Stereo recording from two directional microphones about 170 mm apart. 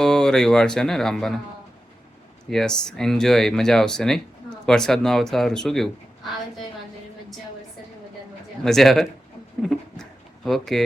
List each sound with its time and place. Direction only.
0.0 s speech: 5° left (ahead or behind)
2.5 s speech: 5° left (ahead or behind)
8.6 s speech: centre (ahead or behind)
9.6 s a sound: centre (ahead or behind)